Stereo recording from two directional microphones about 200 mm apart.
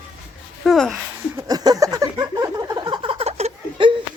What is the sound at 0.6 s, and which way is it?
Speech, centre (ahead or behind).